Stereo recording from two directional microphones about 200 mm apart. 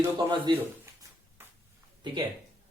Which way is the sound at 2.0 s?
25° right (ahead or behind).